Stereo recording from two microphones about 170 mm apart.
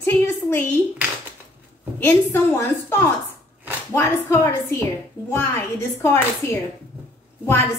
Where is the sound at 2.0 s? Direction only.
10° left (ahead or behind).